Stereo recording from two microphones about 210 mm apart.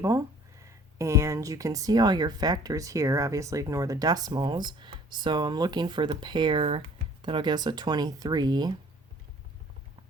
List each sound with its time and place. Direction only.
0.6 s speech: 15° right (ahead or behind)